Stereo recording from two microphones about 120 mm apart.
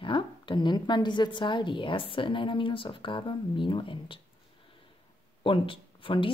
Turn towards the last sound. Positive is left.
turn(degrees=45)  # may be behind; listen again after turning